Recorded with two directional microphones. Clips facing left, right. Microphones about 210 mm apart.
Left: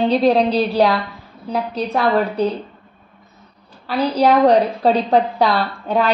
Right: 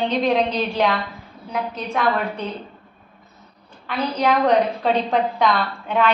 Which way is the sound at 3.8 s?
35° left (ahead or behind).